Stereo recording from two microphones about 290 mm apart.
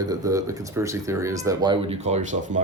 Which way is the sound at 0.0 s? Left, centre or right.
Centre.